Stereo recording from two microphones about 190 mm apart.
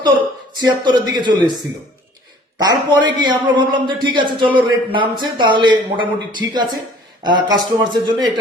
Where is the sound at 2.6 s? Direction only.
20° right (ahead or behind).